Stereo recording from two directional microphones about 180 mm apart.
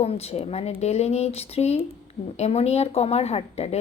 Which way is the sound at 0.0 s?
35° left (ahead or behind).